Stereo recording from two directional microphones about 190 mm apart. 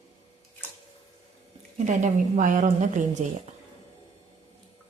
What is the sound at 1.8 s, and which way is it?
Speech, 40° right (ahead or behind).